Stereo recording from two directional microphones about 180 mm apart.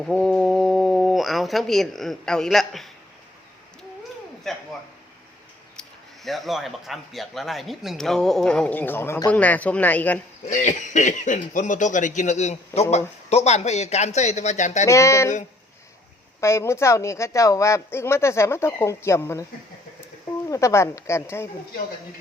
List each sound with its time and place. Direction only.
0.0 s speech: centre (ahead or behind)
4.4 s a sound: centre (ahead or behind)
6.2 s a man's voice: centre (ahead or behind)
10.5 s speech: 45° left (ahead or behind)
14.8 s speech: 15° left (ahead or behind)
16.4 s speech: 15° left (ahead or behind)
20.5 s speech: 15° left (ahead or behind)